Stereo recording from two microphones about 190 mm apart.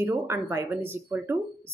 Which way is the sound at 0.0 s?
15° right (ahead or behind).